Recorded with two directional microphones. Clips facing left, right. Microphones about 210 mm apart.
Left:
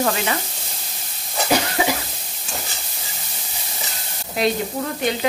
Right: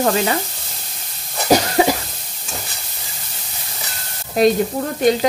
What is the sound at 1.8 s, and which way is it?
Cough, 40° right (ahead or behind).